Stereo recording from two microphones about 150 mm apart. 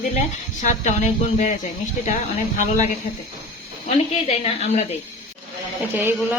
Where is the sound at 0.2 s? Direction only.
55° left (ahead or behind).